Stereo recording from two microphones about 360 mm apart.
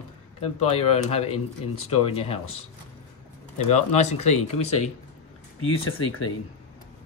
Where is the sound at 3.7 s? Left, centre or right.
Centre.